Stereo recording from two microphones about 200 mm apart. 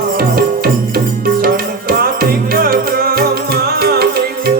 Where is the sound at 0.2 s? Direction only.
45° right (ahead or behind).